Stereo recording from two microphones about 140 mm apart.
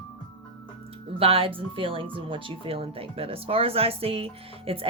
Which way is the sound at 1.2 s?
40° right (ahead or behind).